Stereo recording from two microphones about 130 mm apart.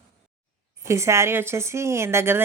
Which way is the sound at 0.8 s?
20° right (ahead or behind).